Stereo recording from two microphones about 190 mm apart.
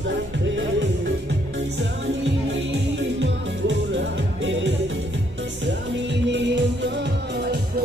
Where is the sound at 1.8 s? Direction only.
75° right (ahead or behind).